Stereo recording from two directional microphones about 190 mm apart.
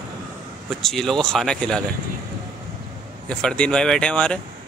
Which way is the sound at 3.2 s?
5° left (ahead or behind).